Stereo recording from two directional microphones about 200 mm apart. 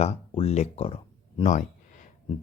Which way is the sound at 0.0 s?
30° left (ahead or behind).